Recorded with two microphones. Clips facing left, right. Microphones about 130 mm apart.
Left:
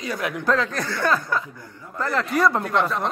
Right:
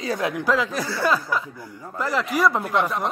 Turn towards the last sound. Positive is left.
turn(degrees=-10)  # may be behind; listen again after turning